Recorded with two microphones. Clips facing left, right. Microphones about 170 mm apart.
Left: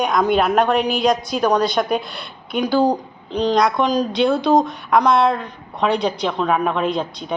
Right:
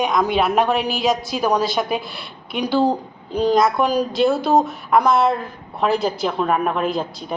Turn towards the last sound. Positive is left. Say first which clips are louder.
# left 1 dB
turn(degrees=-5)  # may be behind; listen again after turning